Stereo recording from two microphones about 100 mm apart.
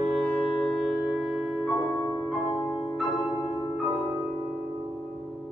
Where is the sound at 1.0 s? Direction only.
10° right (ahead or behind).